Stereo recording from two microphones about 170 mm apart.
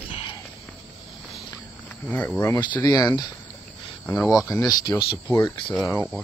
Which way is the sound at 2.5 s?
25° left (ahead or behind).